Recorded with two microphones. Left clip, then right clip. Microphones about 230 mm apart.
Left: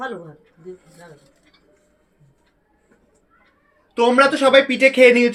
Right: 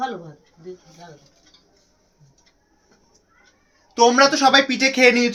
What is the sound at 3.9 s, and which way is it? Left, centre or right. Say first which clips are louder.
Speech: even; right.